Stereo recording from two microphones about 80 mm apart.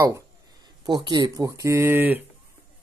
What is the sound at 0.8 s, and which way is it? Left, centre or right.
Speech, right.